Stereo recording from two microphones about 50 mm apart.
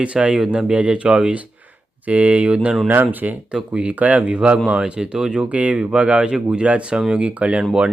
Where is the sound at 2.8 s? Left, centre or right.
Right.